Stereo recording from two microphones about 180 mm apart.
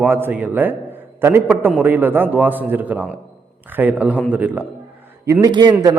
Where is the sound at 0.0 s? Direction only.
10° right (ahead or behind).